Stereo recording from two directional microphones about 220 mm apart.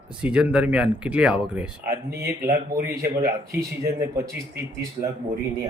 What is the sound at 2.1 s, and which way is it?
Speech, 45° right (ahead or behind).